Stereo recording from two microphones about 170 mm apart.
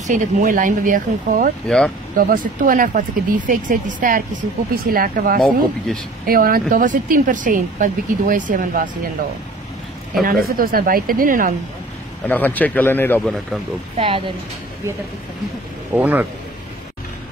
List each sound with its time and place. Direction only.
0.0 s speech: 50° right (ahead or behind)
10.2 s speech: 60° right (ahead or behind)
12.3 s speech: 10° left (ahead or behind)
13.9 s speech: 30° right (ahead or behind)
15.9 s speech: 10° right (ahead or behind)